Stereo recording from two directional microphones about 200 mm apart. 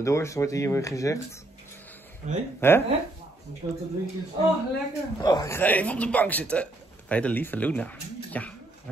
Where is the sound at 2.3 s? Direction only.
35° right (ahead or behind).